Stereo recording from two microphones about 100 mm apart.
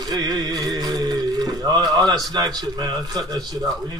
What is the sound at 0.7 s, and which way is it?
Speech, 40° right (ahead or behind).